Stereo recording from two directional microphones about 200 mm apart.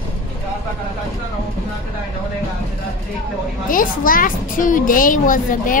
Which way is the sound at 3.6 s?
45° left (ahead or behind).